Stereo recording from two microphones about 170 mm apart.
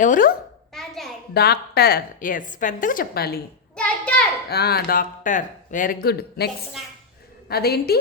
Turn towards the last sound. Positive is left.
turn(degrees=65)  # may be behind; listen again after turning